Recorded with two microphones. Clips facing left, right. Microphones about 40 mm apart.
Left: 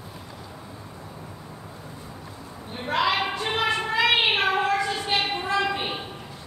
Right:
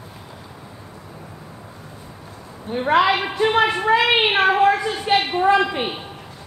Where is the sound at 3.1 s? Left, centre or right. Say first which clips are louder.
Right 7 dB; right.